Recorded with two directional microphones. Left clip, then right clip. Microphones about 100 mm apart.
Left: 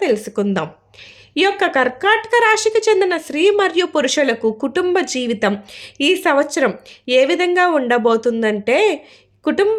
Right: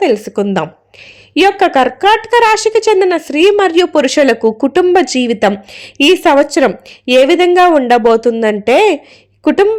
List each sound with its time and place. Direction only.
0.0 s a woman's voice: 35° right (ahead or behind)
4.2 s a woman's voice: 55° right (ahead or behind)